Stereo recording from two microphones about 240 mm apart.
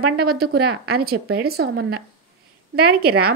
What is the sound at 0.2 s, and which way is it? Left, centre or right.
A woman's voice, right.